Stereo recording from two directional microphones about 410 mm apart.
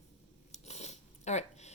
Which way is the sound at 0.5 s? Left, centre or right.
Centre.